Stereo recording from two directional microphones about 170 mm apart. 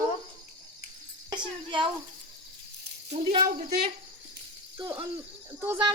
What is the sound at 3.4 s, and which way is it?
Speech, 60° right (ahead or behind).